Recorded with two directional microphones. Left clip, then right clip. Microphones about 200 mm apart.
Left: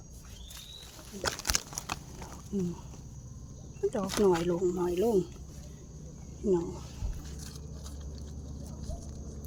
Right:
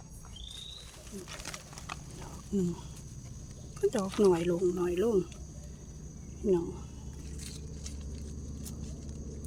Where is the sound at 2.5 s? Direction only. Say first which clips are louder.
Right 2 dB; 15° right (ahead or behind).